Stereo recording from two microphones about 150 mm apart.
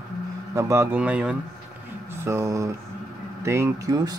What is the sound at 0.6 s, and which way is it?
Speech, 20° right (ahead or behind).